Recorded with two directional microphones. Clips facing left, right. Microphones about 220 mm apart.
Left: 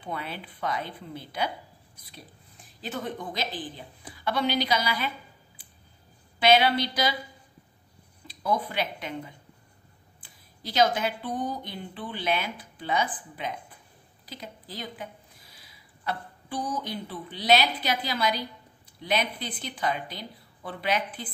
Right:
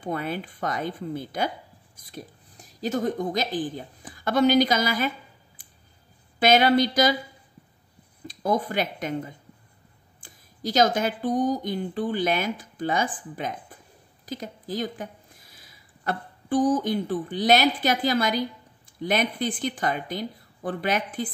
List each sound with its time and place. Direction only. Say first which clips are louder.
0.0 s a woman's voice: right 7 dB; 45° right (ahead or behind)
5.6 s a sound: even; 45° right (ahead or behind)
6.4 s speech: right 3 dB; 45° right (ahead or behind)
8.3 s speech: right 4 dB; 45° right (ahead or behind)